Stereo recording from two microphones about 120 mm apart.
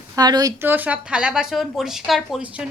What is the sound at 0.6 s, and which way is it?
Speech, 15° right (ahead or behind).